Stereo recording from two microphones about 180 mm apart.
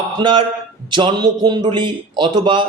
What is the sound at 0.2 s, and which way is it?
A man's voice, 25° right (ahead or behind).